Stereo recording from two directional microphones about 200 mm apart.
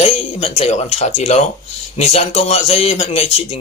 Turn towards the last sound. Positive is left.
turn(degrees=30)  # may be behind; listen again after turning